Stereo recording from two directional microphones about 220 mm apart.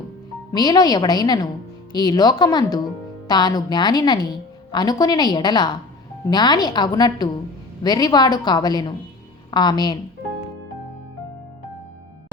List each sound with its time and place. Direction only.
0.5 s a woman's voice: 20° left (ahead or behind)